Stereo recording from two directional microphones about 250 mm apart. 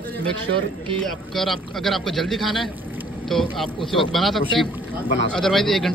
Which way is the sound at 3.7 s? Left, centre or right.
Centre.